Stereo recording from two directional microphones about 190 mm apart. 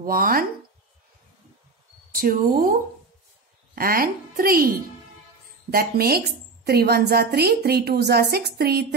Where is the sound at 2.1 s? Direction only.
50° right (ahead or behind).